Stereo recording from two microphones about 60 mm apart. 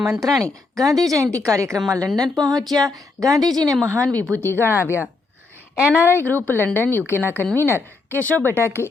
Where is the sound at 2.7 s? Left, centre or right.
Right.